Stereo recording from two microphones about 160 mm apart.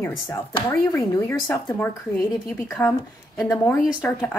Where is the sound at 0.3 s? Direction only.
20° left (ahead or behind).